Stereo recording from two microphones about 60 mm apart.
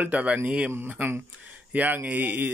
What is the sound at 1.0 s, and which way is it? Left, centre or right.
Speech, right.